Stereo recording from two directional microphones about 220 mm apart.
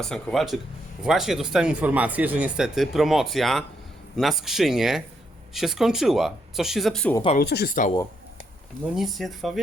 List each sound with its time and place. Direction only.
0.0 s speech: centre (ahead or behind)
7.3 s speech: 45° left (ahead or behind)
9.0 s speech: centre (ahead or behind)